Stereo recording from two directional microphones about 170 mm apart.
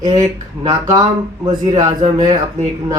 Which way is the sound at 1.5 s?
25° right (ahead or behind).